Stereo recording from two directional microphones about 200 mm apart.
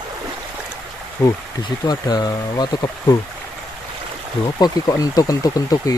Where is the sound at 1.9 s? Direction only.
20° left (ahead or behind).